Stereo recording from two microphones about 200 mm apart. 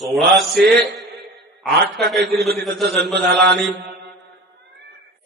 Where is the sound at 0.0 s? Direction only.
Centre (ahead or behind).